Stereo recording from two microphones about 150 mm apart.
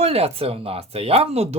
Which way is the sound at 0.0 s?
45° right (ahead or behind).